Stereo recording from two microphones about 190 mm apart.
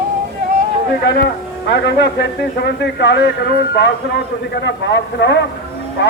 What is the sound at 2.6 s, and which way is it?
Speech, 65° left (ahead or behind).